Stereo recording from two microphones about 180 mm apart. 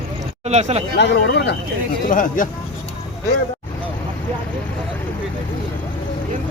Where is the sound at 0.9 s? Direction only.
70° left (ahead or behind).